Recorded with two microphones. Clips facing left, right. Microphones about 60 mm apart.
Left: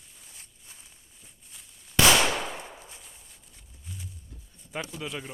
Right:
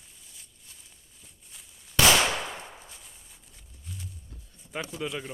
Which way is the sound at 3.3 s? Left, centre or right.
Centre.